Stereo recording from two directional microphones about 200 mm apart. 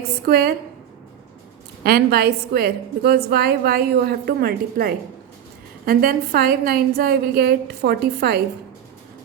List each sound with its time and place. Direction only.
0.3 s a woman's voice: 50° right (ahead or behind)
1.8 s a woman's voice: 50° right (ahead or behind)